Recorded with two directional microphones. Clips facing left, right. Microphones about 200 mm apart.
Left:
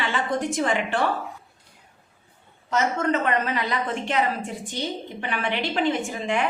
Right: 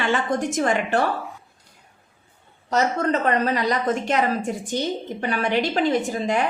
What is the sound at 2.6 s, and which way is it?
A woman's voice, 35° right (ahead or behind).